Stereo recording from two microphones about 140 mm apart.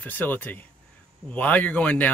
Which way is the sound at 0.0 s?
10° left (ahead or behind).